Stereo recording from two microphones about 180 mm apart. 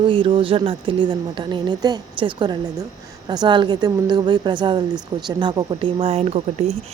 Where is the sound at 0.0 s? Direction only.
30° right (ahead or behind).